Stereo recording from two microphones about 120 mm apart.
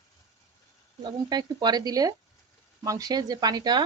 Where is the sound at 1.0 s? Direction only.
40° right (ahead or behind).